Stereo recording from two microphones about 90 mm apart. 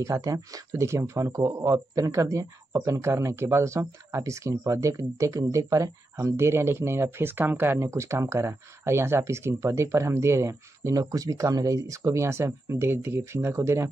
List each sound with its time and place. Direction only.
0.0 s speech: 40° right (ahead or behind)